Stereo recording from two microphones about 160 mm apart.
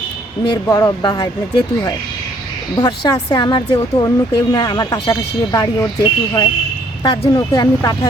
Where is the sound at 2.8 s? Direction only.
25° left (ahead or behind).